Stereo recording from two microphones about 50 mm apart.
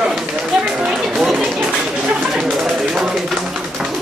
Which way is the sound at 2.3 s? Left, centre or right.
Centre.